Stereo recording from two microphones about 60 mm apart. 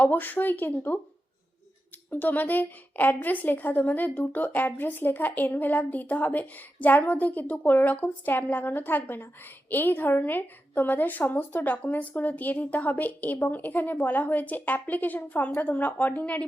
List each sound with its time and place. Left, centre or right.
0.0 s a woman's voice: left
2.0 s a woman's voice: left